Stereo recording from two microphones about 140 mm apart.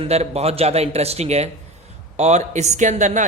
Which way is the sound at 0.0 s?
50° right (ahead or behind).